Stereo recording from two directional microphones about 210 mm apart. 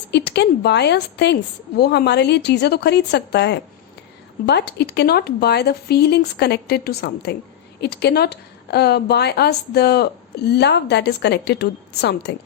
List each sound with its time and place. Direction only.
0.1 s a woman's voice: 55° left (ahead or behind)